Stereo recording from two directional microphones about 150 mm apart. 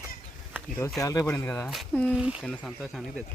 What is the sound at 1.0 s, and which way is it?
Speech, 20° left (ahead or behind).